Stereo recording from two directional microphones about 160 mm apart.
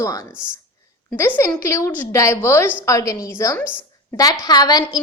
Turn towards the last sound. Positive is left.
turn(degrees=25)  # may be behind; listen again after turning